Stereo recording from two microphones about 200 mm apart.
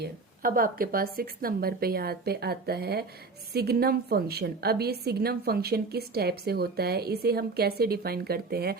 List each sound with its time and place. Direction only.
0.0 s a woman's voice: 45° right (ahead or behind)